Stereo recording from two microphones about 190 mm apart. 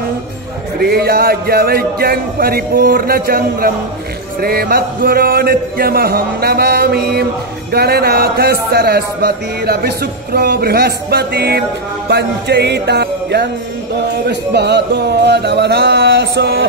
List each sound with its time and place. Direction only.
0.7 s a man's voice: 55° right (ahead or behind)